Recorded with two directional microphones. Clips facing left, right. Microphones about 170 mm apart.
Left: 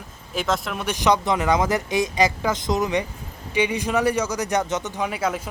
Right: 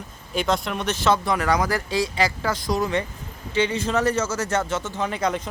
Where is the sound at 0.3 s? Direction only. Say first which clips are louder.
Right 1 dB; centre (ahead or behind).